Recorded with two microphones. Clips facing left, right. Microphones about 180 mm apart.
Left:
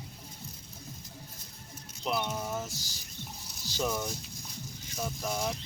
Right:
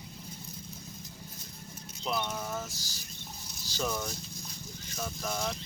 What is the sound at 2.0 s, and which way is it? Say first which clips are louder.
Speech: left 1 dB; 10° left (ahead or behind).